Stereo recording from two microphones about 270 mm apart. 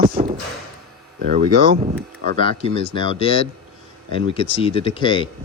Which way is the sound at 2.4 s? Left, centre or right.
Centre.